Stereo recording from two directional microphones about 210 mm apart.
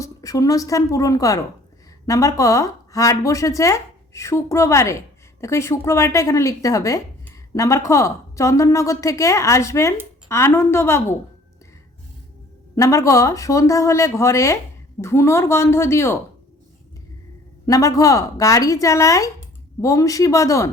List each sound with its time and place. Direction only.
0.0 s a woman's voice: 15° left (ahead or behind)
12.7 s speech: 15° left (ahead or behind)
17.7 s speech: 15° left (ahead or behind)